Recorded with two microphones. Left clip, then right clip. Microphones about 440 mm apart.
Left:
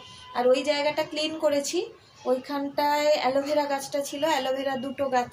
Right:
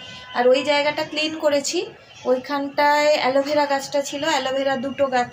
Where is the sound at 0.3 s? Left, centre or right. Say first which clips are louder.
Right 5 dB; left.